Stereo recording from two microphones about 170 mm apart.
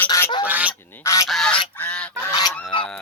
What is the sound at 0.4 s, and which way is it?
Quack, 10° right (ahead or behind).